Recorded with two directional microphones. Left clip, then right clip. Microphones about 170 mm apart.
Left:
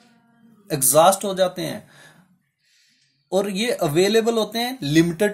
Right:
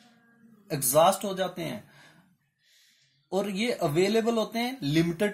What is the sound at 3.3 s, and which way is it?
Speech, 45° left (ahead or behind).